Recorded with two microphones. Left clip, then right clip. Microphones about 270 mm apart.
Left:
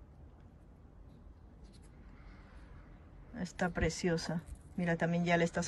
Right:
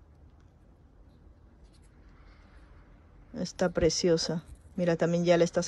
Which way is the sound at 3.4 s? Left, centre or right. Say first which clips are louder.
Right 9 dB; centre.